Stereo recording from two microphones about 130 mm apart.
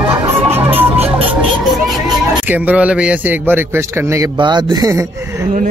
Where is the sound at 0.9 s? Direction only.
50° right (ahead or behind).